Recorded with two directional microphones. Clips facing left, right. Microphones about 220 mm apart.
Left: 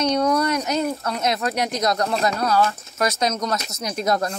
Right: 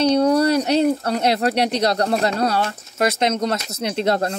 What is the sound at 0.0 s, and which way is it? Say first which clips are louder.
Speech: right 4 dB; 35° right (ahead or behind).